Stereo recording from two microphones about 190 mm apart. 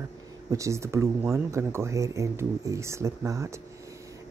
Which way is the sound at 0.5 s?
15° right (ahead or behind).